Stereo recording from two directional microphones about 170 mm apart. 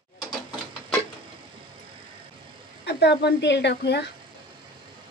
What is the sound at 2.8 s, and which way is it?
A woman's voice, 80° left.